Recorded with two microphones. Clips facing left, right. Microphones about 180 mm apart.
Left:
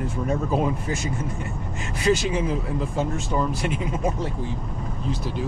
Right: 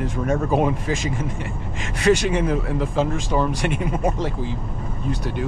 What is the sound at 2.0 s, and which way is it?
Speech, 70° right (ahead or behind).